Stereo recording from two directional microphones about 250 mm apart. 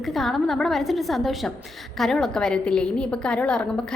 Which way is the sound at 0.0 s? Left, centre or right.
Centre.